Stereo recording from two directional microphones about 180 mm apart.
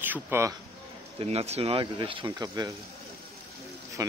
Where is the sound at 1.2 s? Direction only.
35° right (ahead or behind).